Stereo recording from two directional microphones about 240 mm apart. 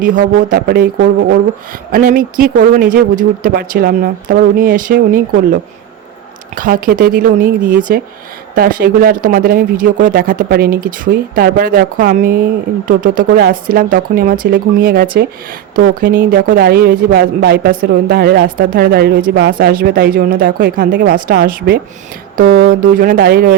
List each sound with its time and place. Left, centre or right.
0.0 s speech: right
6.6 s speech: right
22.6 s speech: right